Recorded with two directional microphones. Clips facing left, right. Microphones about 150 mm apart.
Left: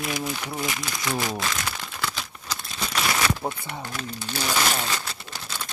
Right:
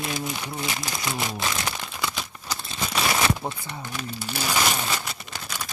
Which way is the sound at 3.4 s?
5° left (ahead or behind).